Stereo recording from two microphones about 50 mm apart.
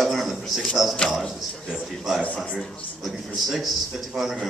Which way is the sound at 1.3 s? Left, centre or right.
Centre.